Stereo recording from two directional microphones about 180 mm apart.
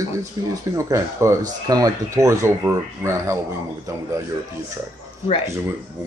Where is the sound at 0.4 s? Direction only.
20° right (ahead or behind).